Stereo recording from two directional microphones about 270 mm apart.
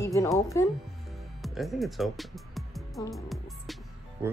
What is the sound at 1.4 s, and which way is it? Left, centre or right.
Speech, centre.